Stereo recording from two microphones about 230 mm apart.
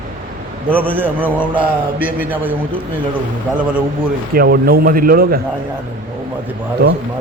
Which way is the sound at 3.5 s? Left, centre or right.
Centre.